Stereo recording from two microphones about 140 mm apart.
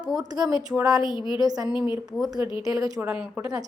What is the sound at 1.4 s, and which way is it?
Speech, 25° right (ahead or behind).